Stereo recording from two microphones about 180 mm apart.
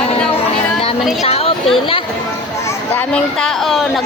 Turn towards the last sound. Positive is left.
turn(degrees=5)  # may be behind; listen again after turning